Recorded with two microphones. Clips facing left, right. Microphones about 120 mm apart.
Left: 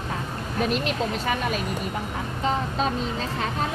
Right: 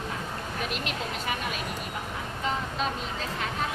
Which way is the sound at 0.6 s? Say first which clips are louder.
Left 10 dB; 35° left (ahead or behind).